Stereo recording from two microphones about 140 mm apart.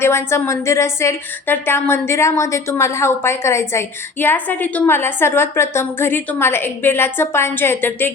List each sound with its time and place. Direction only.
0.0 s a woman's voice: 20° left (ahead or behind)